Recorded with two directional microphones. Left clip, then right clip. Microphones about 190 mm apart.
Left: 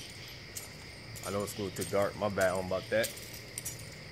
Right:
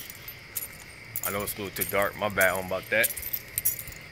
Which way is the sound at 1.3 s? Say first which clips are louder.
Right 3 dB; 25° right (ahead or behind).